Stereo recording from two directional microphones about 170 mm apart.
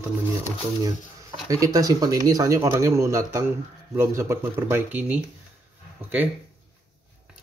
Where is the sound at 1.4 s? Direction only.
20° right (ahead or behind).